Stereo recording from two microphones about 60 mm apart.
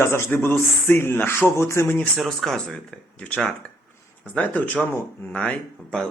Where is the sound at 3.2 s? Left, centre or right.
Centre.